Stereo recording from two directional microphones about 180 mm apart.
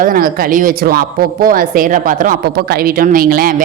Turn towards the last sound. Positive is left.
turn(degrees=-50)  # may be behind; listen again after turning